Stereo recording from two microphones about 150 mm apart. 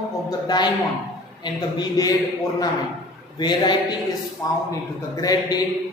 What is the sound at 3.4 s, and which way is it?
A woman's voice, 30° left (ahead or behind).